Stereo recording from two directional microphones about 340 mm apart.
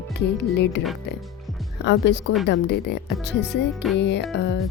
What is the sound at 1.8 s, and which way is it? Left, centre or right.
Music, left.